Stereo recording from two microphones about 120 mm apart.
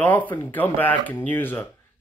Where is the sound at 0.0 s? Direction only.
15° left (ahead or behind).